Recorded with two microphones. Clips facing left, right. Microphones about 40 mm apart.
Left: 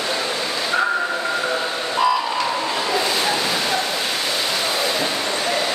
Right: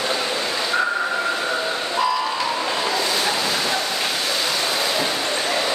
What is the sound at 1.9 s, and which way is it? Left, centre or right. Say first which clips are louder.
Vehicle: left 3 dB; centre.